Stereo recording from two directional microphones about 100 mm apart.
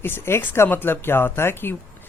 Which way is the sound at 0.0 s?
25° left (ahead or behind).